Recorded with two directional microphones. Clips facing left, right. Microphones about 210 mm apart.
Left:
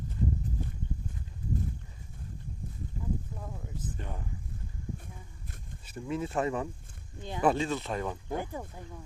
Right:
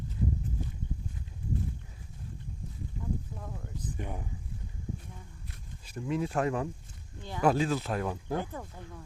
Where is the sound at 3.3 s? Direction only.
5° left (ahead or behind).